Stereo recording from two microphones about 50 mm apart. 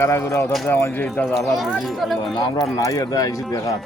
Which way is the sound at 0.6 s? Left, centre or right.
Left.